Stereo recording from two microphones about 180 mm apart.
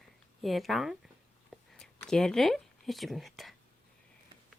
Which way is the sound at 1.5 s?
5° left (ahead or behind).